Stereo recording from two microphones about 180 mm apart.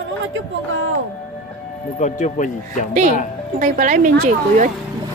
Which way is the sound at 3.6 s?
45° right (ahead or behind).